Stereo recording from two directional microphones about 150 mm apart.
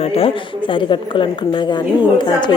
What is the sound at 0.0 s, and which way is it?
A woman's voice, 40° left (ahead or behind).